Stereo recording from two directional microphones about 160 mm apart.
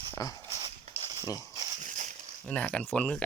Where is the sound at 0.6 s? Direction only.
35° right (ahead or behind).